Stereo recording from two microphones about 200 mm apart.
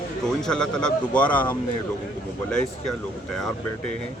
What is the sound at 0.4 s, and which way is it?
Speech, 5° left (ahead or behind).